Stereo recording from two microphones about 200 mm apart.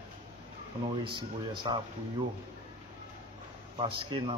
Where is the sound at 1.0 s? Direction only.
25° right (ahead or behind).